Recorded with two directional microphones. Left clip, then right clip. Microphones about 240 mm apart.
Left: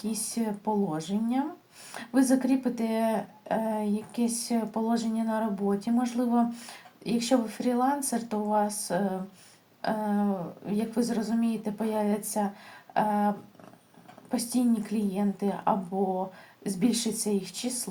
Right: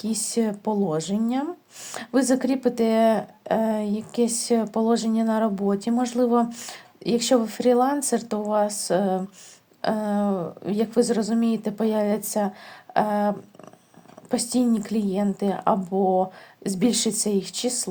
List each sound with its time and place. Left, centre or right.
0.0 s speech: right